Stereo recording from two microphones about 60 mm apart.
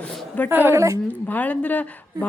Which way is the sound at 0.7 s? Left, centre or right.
Right.